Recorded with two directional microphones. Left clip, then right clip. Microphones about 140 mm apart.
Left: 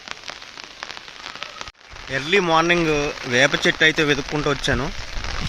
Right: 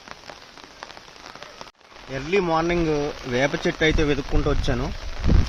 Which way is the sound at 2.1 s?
Centre (ahead or behind).